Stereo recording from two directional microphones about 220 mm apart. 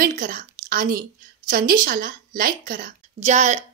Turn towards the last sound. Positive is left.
turn(degrees=-30)  # may be behind; listen again after turning